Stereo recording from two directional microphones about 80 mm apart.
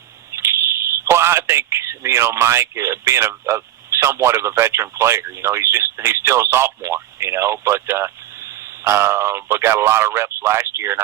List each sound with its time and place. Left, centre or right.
0.3 s speech: right